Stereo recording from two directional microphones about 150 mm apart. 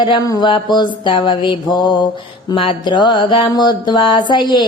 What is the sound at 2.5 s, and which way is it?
Music, 35° left (ahead or behind).